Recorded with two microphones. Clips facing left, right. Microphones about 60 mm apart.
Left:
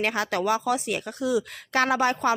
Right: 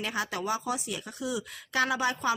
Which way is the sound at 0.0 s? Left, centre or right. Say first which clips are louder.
Left 7 dB; left.